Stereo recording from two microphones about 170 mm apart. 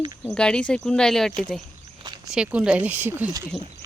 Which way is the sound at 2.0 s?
25° right (ahead or behind).